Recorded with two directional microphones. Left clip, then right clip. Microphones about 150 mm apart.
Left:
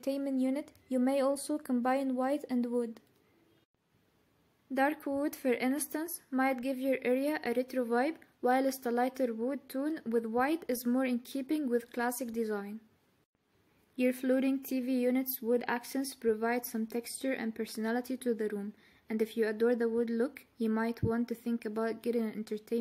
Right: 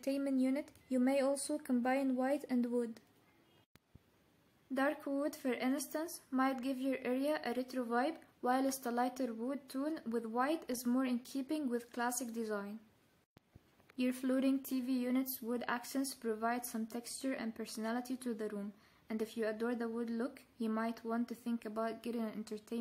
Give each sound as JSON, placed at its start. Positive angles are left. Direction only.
{"t": 0.0, "sound": "speech", "side_deg": 15}
{"t": 4.7, "sound": "speech", "side_deg": 20}
{"t": 13.9, "sound": "speech", "side_deg": 15}